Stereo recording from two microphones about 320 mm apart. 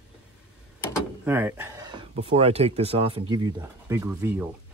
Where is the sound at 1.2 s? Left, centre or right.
Centre.